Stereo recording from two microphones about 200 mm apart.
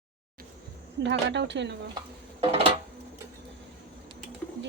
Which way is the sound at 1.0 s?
60° right (ahead or behind).